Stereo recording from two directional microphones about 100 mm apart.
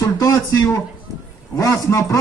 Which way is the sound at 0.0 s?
35° left (ahead or behind).